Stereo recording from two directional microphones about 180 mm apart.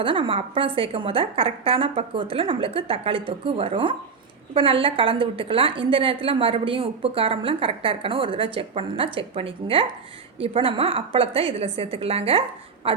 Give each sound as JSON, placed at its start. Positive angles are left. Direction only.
{"t": 0.0, "sound": "a woman's voice", "side_deg": -30}